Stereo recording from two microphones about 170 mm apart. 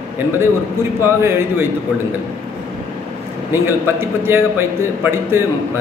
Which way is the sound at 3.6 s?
15° right (ahead or behind).